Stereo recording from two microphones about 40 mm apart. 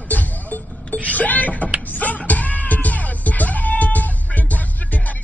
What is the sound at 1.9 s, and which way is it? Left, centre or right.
Music, left.